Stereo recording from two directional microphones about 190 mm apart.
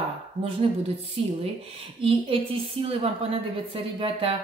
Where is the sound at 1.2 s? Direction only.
30° right (ahead or behind).